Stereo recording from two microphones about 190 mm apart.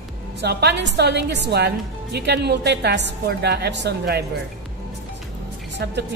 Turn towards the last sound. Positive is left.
turn(degrees=-60)  # may be behind; listen again after turning